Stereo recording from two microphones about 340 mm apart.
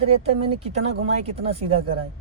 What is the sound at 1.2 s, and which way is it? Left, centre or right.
Speech, centre.